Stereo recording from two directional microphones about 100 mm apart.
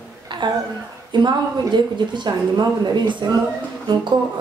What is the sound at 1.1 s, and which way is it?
Speech, 50° right (ahead or behind).